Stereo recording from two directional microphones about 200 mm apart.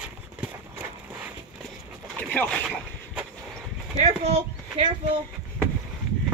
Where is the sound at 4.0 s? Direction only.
35° right (ahead or behind).